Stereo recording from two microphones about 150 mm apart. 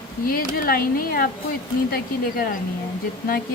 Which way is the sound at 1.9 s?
90° left.